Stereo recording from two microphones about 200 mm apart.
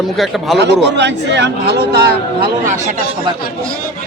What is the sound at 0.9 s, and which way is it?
Speech, 60° right (ahead or behind).